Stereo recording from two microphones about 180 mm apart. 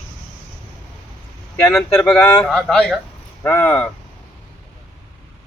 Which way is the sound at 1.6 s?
10° left (ahead or behind).